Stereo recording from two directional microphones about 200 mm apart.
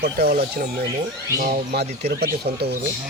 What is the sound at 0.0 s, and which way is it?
Speech, 50° right (ahead or behind).